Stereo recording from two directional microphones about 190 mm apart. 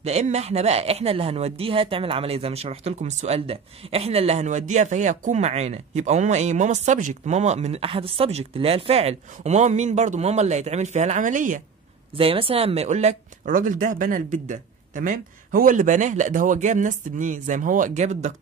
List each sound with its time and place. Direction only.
0.0 s speech: 35° right (ahead or behind)
12.2 s speech: 30° right (ahead or behind)